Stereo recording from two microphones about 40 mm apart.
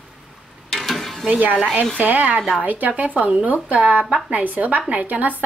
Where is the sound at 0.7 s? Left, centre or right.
Centre.